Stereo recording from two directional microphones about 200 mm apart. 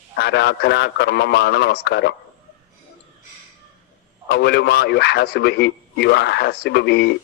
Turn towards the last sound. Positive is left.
turn(degrees=55)  # may be behind; listen again after turning